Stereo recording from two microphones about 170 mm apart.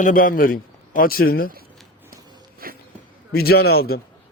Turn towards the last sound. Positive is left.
turn(degrees=65)  # may be behind; listen again after turning